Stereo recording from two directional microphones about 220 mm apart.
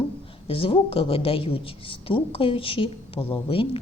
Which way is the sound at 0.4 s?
25° left (ahead or behind).